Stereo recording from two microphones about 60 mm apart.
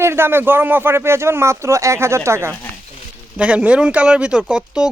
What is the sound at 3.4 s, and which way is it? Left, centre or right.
Speech, right.